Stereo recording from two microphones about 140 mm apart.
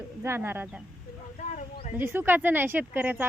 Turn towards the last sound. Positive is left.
turn(degrees=-15)  # may be behind; listen again after turning